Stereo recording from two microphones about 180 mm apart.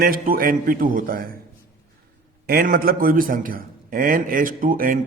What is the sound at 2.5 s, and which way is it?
A man's voice, 55° right (ahead or behind).